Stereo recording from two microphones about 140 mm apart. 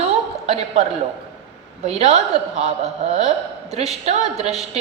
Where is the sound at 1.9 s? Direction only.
50° right (ahead or behind).